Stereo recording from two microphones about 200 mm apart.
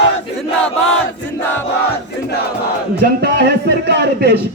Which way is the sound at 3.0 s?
55° right (ahead or behind).